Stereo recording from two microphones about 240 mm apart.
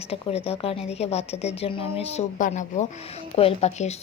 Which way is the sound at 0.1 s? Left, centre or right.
Left.